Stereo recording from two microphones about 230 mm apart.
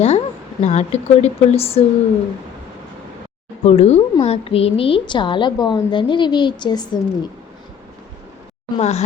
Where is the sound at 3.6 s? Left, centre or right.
Left.